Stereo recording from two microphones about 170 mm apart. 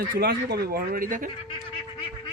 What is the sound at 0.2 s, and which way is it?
Speech, 70° right (ahead or behind).